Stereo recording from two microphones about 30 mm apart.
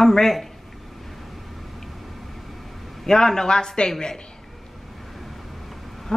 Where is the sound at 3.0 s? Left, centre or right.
Left.